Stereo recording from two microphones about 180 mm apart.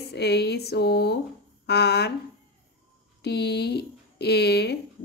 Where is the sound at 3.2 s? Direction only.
65° left (ahead or behind).